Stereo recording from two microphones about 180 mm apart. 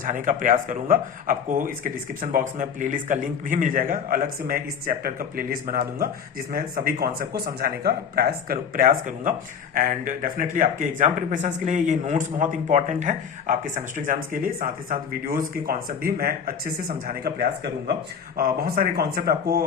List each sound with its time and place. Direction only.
0.0 s a man's voice: 45° right (ahead or behind)